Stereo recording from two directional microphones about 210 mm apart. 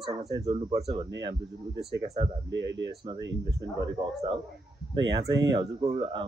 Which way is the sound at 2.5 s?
60° right (ahead or behind).